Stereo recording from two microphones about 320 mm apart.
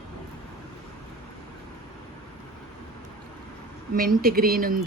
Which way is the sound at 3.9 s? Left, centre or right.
Right.